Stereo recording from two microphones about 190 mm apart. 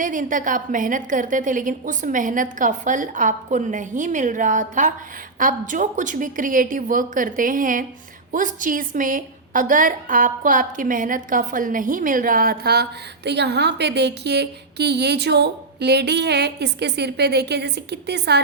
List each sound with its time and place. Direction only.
0.0 s a woman's voice: 45° right (ahead or behind); by 18.3 s 60° right (ahead or behind)